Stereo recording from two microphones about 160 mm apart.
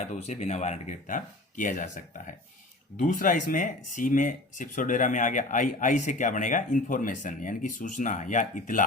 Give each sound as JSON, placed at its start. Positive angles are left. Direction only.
{"t": 0.0, "sound": "speech", "side_deg": 45}